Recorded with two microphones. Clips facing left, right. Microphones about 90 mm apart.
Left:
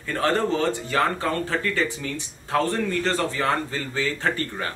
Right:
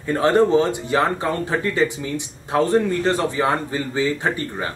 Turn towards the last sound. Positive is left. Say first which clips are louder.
# right 2 dB
turn(degrees=-15)  # may be behind; listen again after turning